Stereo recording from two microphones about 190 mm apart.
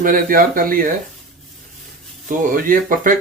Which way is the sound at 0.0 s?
45° right (ahead or behind).